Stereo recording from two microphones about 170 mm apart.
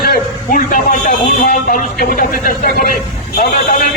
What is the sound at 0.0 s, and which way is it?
Speech, 60° left (ahead or behind).